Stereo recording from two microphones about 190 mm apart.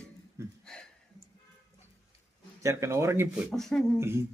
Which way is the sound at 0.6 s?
5° left (ahead or behind).